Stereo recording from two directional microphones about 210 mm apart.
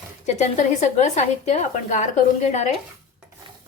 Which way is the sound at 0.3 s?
35° left (ahead or behind).